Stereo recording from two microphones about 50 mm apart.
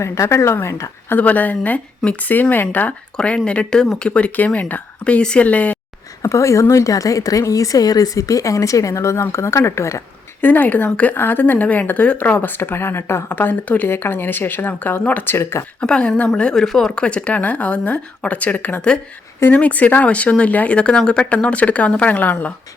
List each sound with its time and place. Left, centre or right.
0.0 s speech: left
1.2 s speech: left
3.2 s speech: left
4.4 s speech: left
6.2 s a woman's voice: left
8.2 s a woman's voice: left
9.2 s speech: left
10.4 s speech: left
11.1 s speech: left
15.2 s speech: left
15.8 s speech: centre
16.6 s speech: centre
16.9 s speech: left